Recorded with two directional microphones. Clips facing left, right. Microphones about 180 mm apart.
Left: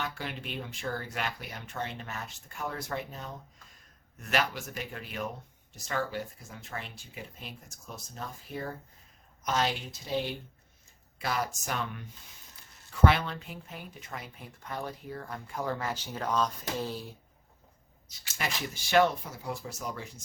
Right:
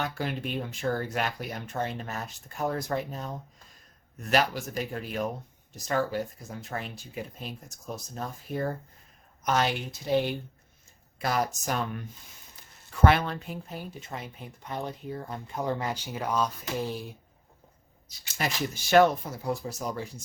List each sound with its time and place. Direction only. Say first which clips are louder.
0.0 s speech: right 6 dB; 40° right (ahead or behind)
9.4 s a woman's voice: right 3 dB; 60° right (ahead or behind)
11.2 s speech: right 4 dB; 40° right (ahead or behind)
13.1 s speech: right 4 dB; 50° right (ahead or behind); by 17.2 s 15° right (ahead or behind)
18.3 s speech: right 4 dB; 45° right (ahead or behind)